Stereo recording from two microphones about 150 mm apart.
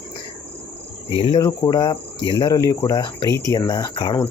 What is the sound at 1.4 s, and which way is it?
Speech, 25° left (ahead or behind).